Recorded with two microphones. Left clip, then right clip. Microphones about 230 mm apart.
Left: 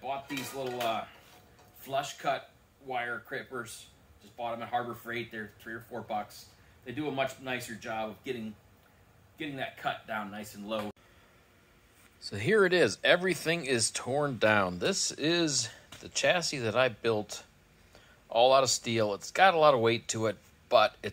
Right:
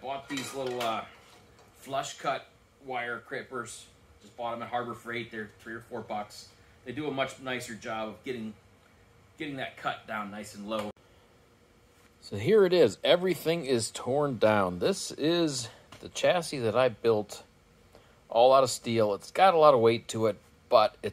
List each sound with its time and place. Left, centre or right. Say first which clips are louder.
0.0 s dishes: even; centre
1.8 s speech: even; centre
9.4 s speech: even; centre
12.3 s speech: right 2 dB; centre